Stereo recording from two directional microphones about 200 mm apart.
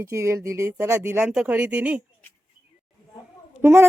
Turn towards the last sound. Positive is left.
turn(degrees=-10)  # may be behind; listen again after turning